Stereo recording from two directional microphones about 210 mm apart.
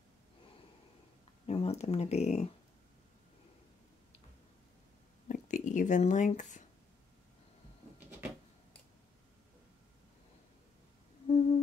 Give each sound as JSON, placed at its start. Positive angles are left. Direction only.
{"t": 1.5, "sound": "speech", "side_deg": 30}
{"t": 5.3, "sound": "speech", "side_deg": 35}
{"t": 11.2, "sound": "humming", "side_deg": 30}